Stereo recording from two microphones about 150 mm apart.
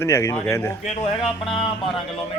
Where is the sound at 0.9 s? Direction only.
45° left (ahead or behind).